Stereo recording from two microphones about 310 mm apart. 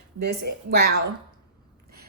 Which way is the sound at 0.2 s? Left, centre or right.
Right.